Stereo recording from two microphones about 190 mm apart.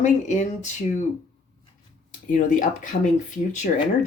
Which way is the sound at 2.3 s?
45° left (ahead or behind).